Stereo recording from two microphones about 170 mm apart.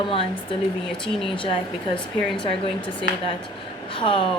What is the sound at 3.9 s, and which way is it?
Speech, 30° left (ahead or behind).